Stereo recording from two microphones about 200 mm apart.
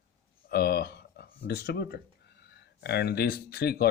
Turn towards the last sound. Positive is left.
turn(degrees=50)  # may be behind; listen again after turning